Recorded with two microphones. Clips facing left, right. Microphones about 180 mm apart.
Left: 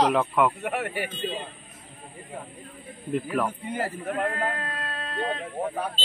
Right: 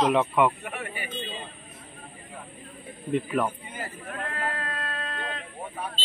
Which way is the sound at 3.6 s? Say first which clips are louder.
Left 8 dB; 70° left (ahead or behind).